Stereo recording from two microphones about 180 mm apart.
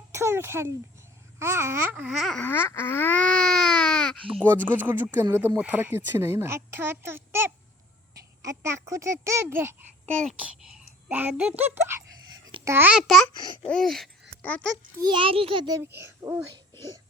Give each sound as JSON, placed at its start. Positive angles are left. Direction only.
{"t": 0.1, "sound": "a sound", "side_deg": -15}
{"t": 1.4, "sound": "babbling", "side_deg": -15}
{"t": 4.6, "sound": "a child's voice", "side_deg": -10}
{"t": 12.6, "sound": "babbling", "side_deg": -10}
{"t": 13.7, "sound": "speech", "side_deg": 0}
{"t": 14.9, "sound": "a child's voice", "side_deg": -25}